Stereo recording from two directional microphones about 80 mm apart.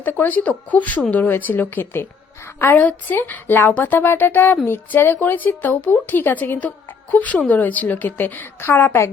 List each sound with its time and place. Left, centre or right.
0.0 s speech: left